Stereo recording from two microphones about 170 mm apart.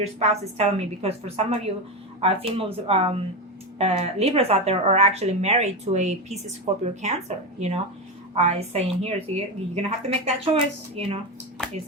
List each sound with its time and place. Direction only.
0.2 s a woman's voice: 40° right (ahead or behind)